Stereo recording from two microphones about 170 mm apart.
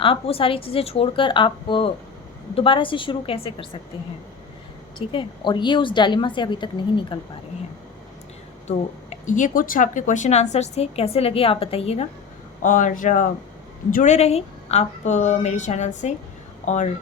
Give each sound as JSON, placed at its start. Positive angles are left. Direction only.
{"t": 0.0, "sound": "speech", "side_deg": 35}
{"t": 4.9, "sound": "a woman's voice", "side_deg": 30}
{"t": 8.6, "sound": "speech", "side_deg": 45}
{"t": 12.6, "sound": "a woman's voice", "side_deg": 50}